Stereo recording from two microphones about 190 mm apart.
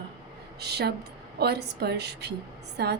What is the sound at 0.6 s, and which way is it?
A woman's voice, 60° right (ahead or behind).